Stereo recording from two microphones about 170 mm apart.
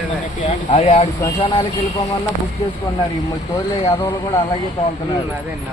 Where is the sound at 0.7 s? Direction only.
40° left (ahead or behind).